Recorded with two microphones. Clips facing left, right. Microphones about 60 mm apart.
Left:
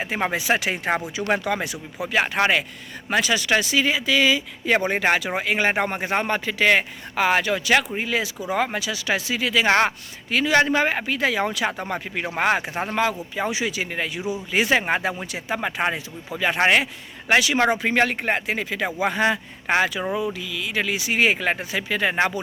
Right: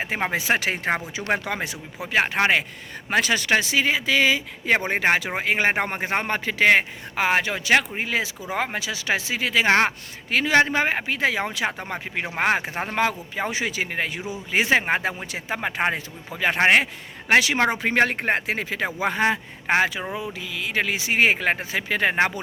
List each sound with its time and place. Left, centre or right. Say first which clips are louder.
0.3 s speech: even; right
1.3 s speech: left 2 dB; right
14.2 s speech: left 4 dB; centre
14.5 s speech: right 1 dB; right